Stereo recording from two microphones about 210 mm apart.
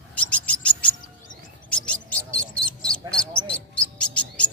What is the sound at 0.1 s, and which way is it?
Owl, 5° left (ahead or behind).